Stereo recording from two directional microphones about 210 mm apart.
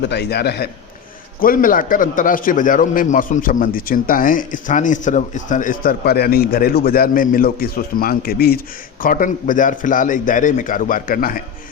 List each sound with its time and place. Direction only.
0.1 s a man's voice: 50° left (ahead or behind)